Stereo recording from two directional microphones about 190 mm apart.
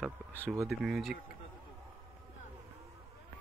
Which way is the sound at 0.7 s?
Centre (ahead or behind).